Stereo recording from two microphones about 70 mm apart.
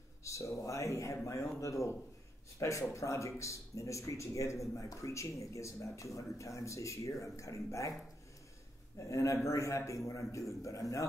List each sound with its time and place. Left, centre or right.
0.2 s speech: left
8.9 s speech: left